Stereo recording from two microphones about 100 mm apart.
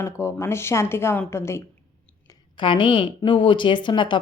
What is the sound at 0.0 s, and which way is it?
Speech, 30° left (ahead or behind).